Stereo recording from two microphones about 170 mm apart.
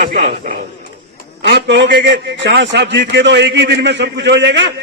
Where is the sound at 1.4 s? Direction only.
85° right.